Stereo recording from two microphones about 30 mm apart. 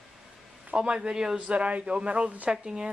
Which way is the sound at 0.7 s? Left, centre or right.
Right.